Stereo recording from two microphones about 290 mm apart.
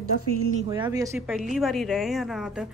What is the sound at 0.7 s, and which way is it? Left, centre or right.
Speech, centre.